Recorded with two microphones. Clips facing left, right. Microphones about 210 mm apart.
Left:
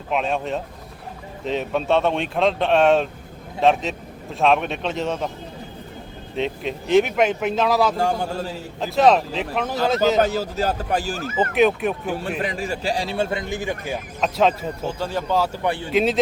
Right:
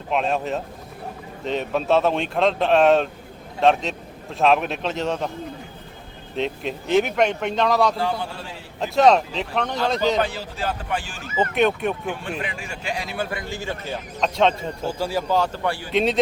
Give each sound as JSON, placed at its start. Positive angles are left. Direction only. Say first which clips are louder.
{"t": 0.1, "sound": "a man's voice", "louder": "even", "side_deg": 0}
{"t": 6.3, "sound": "a man's voice", "louder": "left 1 dB", "side_deg": 0}
{"t": 7.9, "sound": "a man's voice", "louder": "left 3 dB", "side_deg": 45}
{"t": 8.8, "sound": "a man's voice", "louder": "even", "side_deg": 0}
{"t": 10.2, "sound": "speech", "louder": "left 5 dB", "side_deg": 40}
{"t": 11.3, "sound": "a man's voice", "louder": "left 2 dB", "side_deg": 0}
{"t": 12.4, "sound": "speech", "louder": "left 6 dB", "side_deg": 40}
{"t": 14.8, "sound": "speech", "louder": "right 1 dB", "side_deg": -10}
{"t": 15.6, "sound": "speech", "louder": "left 2 dB", "side_deg": 20}
{"t": 15.9, "sound": "a man's voice", "louder": "left 1 dB", "side_deg": 5}